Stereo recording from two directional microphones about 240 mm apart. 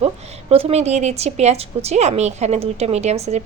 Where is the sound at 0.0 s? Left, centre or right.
Right.